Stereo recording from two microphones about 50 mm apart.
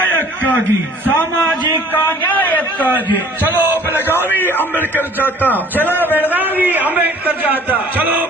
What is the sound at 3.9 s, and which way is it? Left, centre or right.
A man's voice, left.